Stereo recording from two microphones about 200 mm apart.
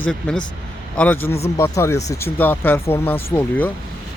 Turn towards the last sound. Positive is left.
turn(degrees=10)  # may be behind; listen again after turning